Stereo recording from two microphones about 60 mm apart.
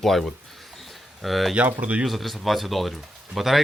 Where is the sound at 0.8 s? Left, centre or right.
Centre.